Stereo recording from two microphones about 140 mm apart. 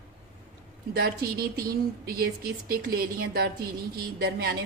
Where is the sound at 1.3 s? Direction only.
90° right.